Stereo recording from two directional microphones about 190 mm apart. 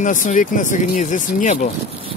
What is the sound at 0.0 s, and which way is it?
Speech, 45° left (ahead or behind).